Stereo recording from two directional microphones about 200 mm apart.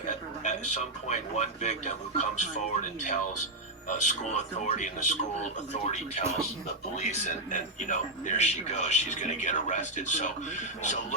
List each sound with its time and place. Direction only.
0.1 s speech: 35° left (ahead or behind)